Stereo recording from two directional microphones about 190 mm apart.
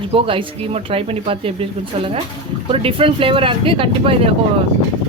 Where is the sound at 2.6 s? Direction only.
30° right (ahead or behind).